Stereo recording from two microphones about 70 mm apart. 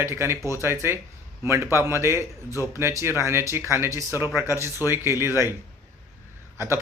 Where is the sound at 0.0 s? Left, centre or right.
Right.